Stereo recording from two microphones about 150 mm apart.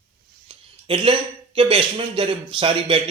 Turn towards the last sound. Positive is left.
turn(degrees=-35)  # may be behind; listen again after turning